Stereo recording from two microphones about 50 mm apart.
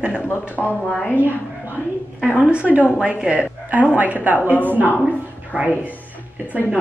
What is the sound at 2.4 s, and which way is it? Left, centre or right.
Speech, right.